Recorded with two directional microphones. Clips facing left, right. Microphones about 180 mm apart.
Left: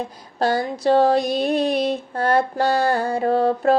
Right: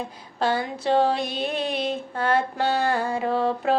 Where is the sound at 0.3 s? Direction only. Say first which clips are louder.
Left 4 dB; 40° left (ahead or behind).